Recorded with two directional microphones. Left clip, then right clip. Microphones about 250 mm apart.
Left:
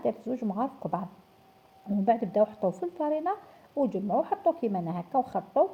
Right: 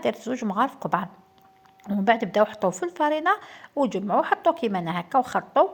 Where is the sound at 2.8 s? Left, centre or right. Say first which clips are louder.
Right 6 dB; right.